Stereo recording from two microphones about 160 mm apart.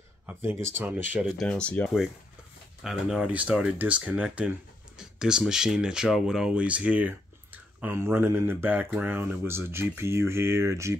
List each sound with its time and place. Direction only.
0.3 s speech: 15° right (ahead or behind)
1.4 s speech: 5° left (ahead or behind)
2.8 s speech: 5° right (ahead or behind)